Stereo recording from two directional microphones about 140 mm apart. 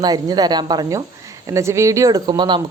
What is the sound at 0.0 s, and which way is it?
Speech, 30° right (ahead or behind).